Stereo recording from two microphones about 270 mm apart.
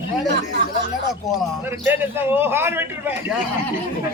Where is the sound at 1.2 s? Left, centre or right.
Centre.